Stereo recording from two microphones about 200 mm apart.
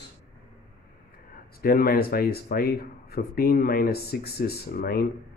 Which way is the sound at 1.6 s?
45° left (ahead or behind).